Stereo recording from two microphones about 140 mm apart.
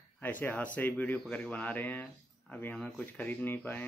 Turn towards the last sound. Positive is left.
turn(degrees=15)  # may be behind; listen again after turning